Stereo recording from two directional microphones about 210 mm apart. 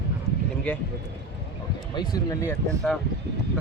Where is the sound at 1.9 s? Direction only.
15° left (ahead or behind).